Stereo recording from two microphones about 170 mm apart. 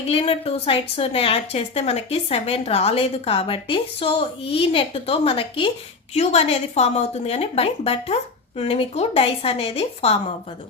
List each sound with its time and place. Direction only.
0.1 s speech: 35° left (ahead or behind)